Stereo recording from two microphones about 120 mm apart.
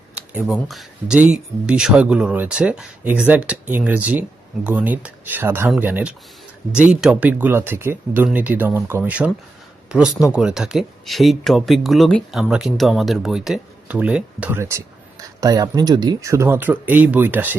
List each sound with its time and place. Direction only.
0.4 s speech: centre (ahead or behind)
14.6 s speech: 25° right (ahead or behind)